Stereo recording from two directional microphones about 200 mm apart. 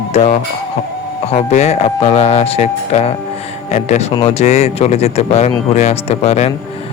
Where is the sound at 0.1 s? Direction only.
35° left (ahead or behind).